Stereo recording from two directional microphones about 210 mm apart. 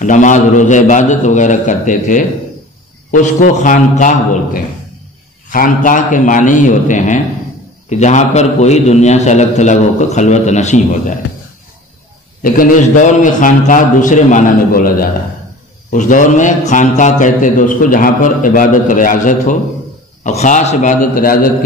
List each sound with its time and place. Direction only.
0.0 s a man's voice: 35° left (ahead or behind)
12.4 s a man's voice: 40° left (ahead or behind)